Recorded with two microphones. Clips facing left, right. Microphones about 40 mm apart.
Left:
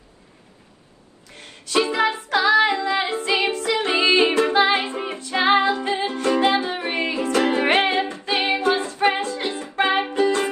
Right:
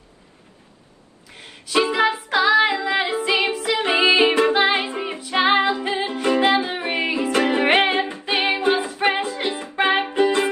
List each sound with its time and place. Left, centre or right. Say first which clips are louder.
1.3 s music: right 1 dB; centre
2.4 s female singing: even; centre
2.8 s music: right 1 dB; centre
3.7 s music: right 3 dB; right
4.6 s music: left 1 dB; centre
5.9 s music: even; right
6.8 s music: right 1 dB; centre
7.3 s music: even; right
7.6 s music: right 1 dB; right